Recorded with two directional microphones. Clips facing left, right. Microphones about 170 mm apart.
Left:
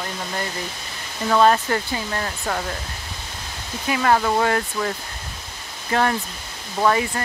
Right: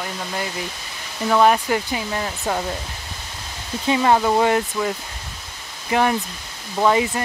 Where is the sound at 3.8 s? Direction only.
20° right (ahead or behind).